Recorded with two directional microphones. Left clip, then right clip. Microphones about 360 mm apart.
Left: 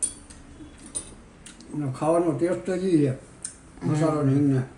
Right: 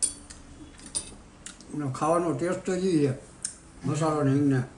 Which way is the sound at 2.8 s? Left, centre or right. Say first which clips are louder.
Left 2 dB; centre.